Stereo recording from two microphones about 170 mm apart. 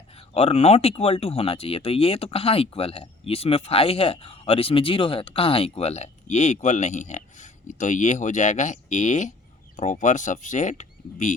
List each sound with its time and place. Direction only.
0.3 s speech: 40° left (ahead or behind)